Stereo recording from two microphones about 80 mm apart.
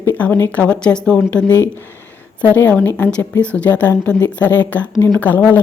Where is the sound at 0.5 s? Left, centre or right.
Centre.